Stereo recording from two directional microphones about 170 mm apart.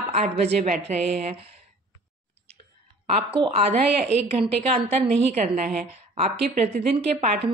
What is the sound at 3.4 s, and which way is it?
A woman's voice, 35° right (ahead or behind).